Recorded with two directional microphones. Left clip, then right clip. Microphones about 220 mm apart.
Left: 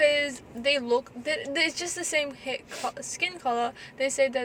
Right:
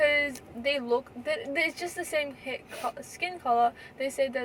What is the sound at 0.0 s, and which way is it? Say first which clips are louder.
A woman's voice: left 2 dB; 15° left (ahead or behind).